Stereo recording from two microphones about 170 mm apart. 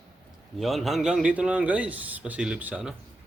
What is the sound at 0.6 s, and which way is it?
Speech, centre (ahead or behind).